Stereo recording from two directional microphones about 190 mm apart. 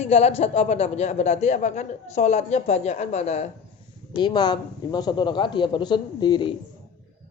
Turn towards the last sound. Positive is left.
turn(degrees=25)  # may be behind; listen again after turning